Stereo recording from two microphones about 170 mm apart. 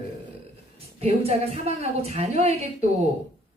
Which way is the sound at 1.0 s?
35° right (ahead or behind).